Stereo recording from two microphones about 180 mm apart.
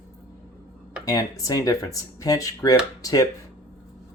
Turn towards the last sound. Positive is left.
turn(degrees=20)  # may be behind; listen again after turning